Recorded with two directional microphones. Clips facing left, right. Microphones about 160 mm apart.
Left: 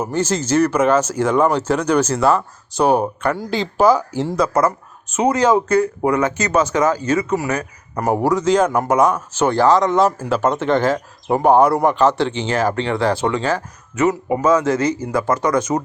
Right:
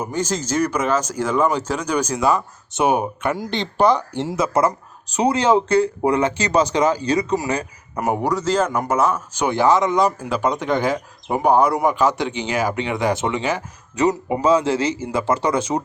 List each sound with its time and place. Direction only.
0.1 s speech: 10° right (ahead or behind)
3.0 s speech: 10° right (ahead or behind)
3.5 s speech: 5° left (ahead or behind)
4.5 s speech: 30° right (ahead or behind)
7.9 s speech: centre (ahead or behind)
8.4 s speech: 5° right (ahead or behind)
8.6 s a man's voice: 10° left (ahead or behind)
9.0 s speech: 5° right (ahead or behind)
9.8 s speech: 5° left (ahead or behind)
10.6 s speech: 15° right (ahead or behind)
14.4 s speech: 30° right (ahead or behind)